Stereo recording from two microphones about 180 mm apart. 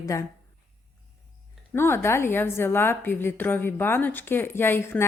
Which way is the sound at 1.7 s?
15° left (ahead or behind).